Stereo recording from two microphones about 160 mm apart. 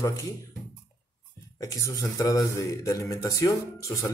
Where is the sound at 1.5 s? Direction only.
20° left (ahead or behind).